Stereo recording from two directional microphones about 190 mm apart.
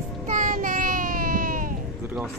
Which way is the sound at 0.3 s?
45° right (ahead or behind).